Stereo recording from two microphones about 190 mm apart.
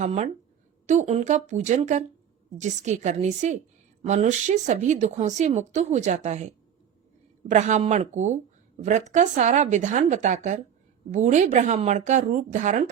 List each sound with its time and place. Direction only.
0.0 s a woman's voice: 35° right (ahead or behind)
7.5 s a woman's voice: 40° right (ahead or behind)